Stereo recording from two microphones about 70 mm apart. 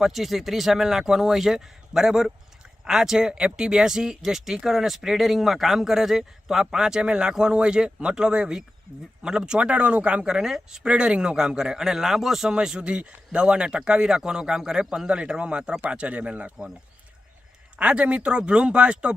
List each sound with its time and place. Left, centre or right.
0.0 s speech: centre
17.7 s speech: centre